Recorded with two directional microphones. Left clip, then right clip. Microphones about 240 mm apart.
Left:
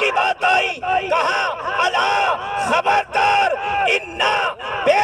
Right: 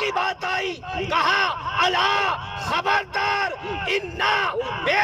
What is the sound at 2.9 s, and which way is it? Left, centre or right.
Battle cry, left.